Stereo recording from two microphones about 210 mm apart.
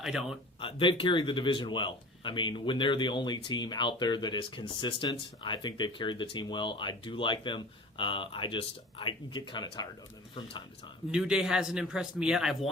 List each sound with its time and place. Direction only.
0.0 s a man's voice: centre (ahead or behind)
0.6 s speech: 25° left (ahead or behind)
11.1 s a man's voice: 5° right (ahead or behind)